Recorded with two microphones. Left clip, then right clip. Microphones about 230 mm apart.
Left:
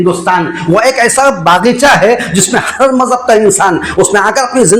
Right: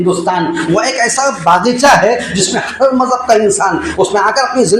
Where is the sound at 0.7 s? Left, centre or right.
Left.